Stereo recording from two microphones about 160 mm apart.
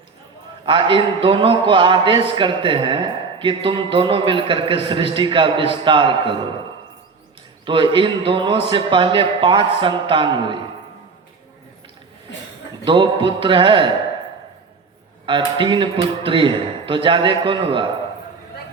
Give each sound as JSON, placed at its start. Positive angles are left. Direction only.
{"t": 0.6, "sound": "a man's voice", "side_deg": -30}
{"t": 7.6, "sound": "a man's voice", "side_deg": -30}
{"t": 12.8, "sound": "a man's voice", "side_deg": -30}
{"t": 15.3, "sound": "a man's voice", "side_deg": -30}